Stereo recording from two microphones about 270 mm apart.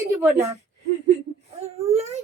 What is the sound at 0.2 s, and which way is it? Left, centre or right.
Speech, centre.